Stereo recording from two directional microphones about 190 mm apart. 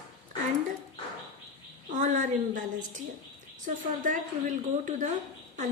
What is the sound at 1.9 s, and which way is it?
A woman's voice, 40° right (ahead or behind).